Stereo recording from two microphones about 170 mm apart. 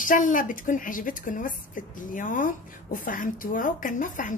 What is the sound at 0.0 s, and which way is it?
A woman's voice, 50° left (ahead or behind).